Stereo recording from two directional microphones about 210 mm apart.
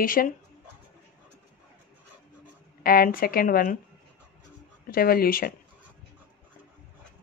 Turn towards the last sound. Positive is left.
turn(degrees=45)  # may be behind; listen again after turning